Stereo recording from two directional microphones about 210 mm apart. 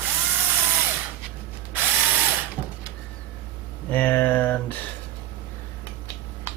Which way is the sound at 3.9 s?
10° left (ahead or behind).